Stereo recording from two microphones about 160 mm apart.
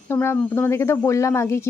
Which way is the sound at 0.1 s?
15° left (ahead or behind).